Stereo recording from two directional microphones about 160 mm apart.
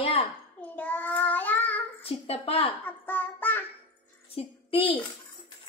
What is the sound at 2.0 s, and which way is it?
Speech, 40° left (ahead or behind).